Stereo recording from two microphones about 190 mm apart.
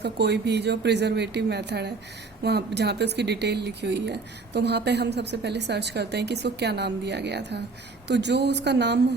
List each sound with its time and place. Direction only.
0.0 s speech: 60° right (ahead or behind)